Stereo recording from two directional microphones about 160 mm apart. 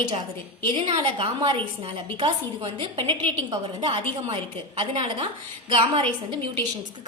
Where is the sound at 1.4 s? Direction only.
30° right (ahead or behind).